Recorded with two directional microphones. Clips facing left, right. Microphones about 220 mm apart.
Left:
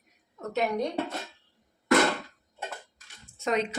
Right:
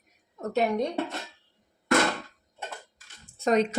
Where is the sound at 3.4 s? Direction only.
40° right (ahead or behind).